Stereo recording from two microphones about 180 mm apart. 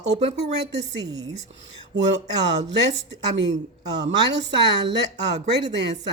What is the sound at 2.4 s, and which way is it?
A woman's voice, 70° right (ahead or behind).